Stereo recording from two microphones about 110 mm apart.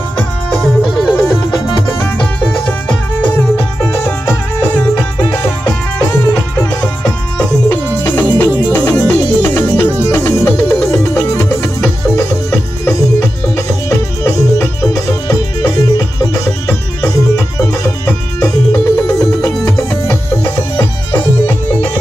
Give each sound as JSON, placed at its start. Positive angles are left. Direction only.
{"t": 0.5, "sound": "music", "side_deg": 0}
{"t": 2.9, "sound": "music", "side_deg": 15}
{"t": 6.3, "sound": "music", "side_deg": 30}
{"t": 7.7, "sound": "music", "side_deg": 20}